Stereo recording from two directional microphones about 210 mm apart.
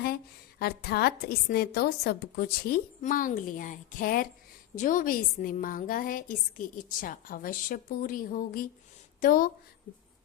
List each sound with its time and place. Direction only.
0.6 s a woman's voice: 50° left (ahead or behind)